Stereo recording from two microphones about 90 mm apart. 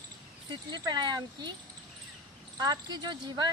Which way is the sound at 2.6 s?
50° right (ahead or behind).